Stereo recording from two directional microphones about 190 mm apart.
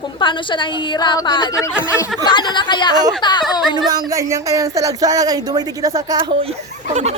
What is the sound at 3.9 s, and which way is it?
Speech, 20° right (ahead or behind).